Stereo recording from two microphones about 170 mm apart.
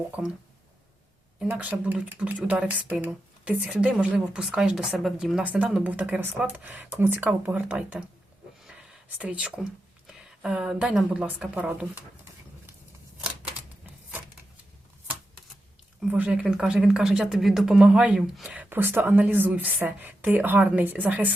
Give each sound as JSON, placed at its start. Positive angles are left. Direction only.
{"t": 0.2, "sound": "speech", "side_deg": 0}
{"t": 1.5, "sound": "speech", "side_deg": -10}
{"t": 8.6, "sound": "a sound", "side_deg": -5}
{"t": 10.1, "sound": "speech", "side_deg": -5}
{"t": 16.0, "sound": "speech", "side_deg": -5}